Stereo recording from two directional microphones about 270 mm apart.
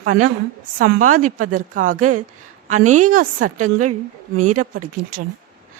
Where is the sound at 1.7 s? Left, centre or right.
Right.